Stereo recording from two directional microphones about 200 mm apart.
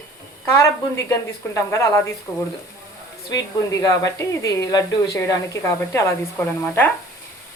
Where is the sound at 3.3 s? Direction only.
15° left (ahead or behind).